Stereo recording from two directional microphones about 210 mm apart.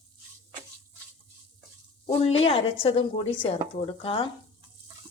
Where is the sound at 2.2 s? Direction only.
25° left (ahead or behind).